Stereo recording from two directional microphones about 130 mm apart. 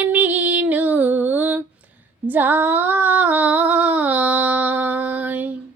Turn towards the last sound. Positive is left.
turn(degrees=-10)  # may be behind; listen again after turning